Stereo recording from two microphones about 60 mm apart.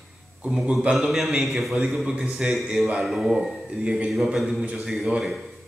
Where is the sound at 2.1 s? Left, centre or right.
Right.